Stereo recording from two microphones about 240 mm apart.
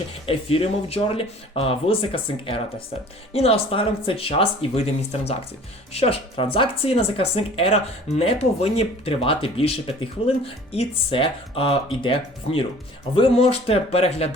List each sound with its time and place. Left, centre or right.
0.3 s speech: left
5.9 s speech: left